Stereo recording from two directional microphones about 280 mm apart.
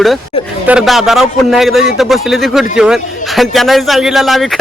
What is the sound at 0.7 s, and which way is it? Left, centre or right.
A man's voice, centre.